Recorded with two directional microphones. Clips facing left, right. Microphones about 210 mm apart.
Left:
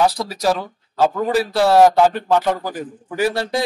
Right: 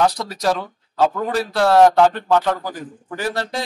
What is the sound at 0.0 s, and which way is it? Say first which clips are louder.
A man's voice: left 1 dB; 5° left (ahead or behind).